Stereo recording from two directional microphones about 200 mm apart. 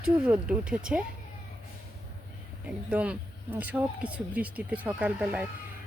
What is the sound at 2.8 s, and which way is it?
Speech, 5° right (ahead or behind).